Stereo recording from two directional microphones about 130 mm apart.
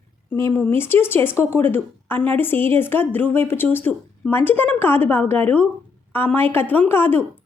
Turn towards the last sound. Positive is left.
turn(degrees=15)  # may be behind; listen again after turning